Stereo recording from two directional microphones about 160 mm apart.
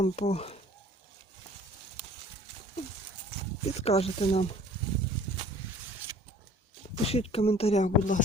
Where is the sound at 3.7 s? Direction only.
40° left (ahead or behind).